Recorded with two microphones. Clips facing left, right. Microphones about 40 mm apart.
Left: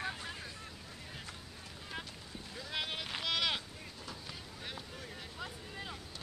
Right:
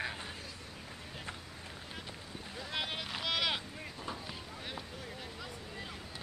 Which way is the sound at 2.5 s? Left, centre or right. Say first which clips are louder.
Right 1 dB; centre.